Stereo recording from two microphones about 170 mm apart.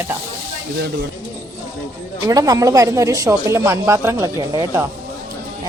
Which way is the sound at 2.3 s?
20° right (ahead or behind).